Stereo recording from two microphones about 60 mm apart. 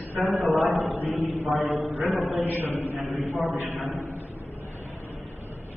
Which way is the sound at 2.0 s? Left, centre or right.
Centre.